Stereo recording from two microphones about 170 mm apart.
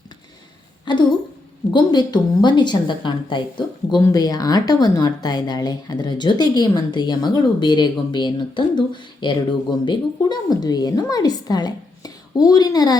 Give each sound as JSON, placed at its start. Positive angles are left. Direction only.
{"t": 0.9, "sound": "a woman's voice", "side_deg": 25}